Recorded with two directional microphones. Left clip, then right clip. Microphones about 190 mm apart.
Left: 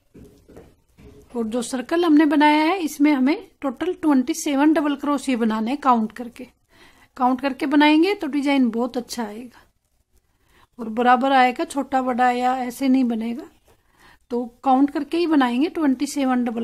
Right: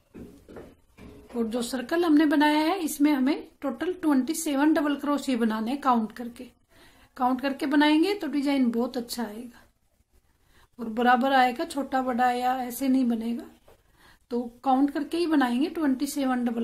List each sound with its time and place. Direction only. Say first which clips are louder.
1.3 s a woman's voice: left 4 dB; 30° left (ahead or behind)
10.8 s a woman's voice: left 5 dB; 25° left (ahead or behind)